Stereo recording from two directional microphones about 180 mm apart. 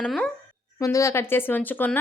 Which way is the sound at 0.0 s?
5° left (ahead or behind).